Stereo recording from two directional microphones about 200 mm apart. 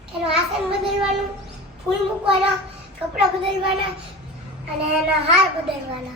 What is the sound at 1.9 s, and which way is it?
Speech, 20° right (ahead or behind).